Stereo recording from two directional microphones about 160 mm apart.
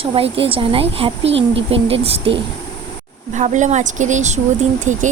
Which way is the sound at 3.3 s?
50° right (ahead or behind).